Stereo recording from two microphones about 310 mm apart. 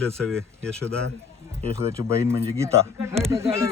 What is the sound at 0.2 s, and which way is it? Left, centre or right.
Speech, centre.